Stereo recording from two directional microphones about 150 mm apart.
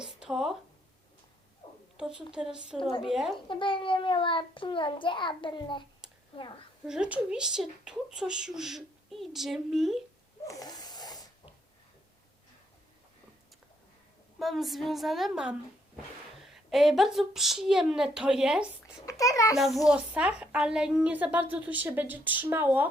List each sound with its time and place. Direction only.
0.0 s a sound: 5° right (ahead or behind)
1.6 s a sound: 40° left (ahead or behind)
2.0 s speech: 5° right (ahead or behind)
3.3 s a child's voice: 35° left (ahead or behind)
6.8 s speech: 5° right (ahead or behind)
10.4 s a sound: 25° left (ahead or behind)
14.3 s speech: centre (ahead or behind)
19.0 s a child's voice: 20° left (ahead or behind)
19.5 s a woman's voice: centre (ahead or behind)